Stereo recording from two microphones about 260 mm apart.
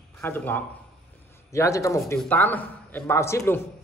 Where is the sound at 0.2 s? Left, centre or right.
Centre.